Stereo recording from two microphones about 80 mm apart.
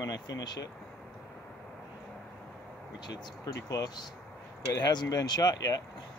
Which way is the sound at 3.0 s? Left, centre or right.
Left.